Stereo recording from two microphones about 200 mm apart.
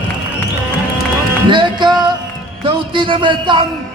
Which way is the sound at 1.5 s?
25° right (ahead or behind).